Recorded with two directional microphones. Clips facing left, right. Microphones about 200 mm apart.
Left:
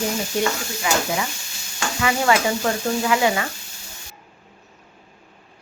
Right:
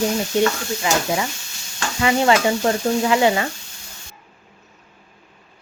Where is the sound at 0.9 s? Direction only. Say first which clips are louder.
Right 2 dB; 30° right (ahead or behind).